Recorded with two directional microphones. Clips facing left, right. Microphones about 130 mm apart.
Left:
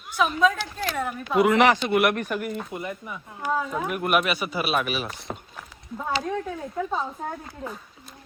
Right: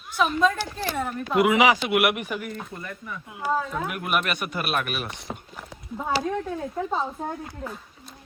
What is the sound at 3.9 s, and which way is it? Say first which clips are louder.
Speech: left 3 dB; centre (ahead or behind).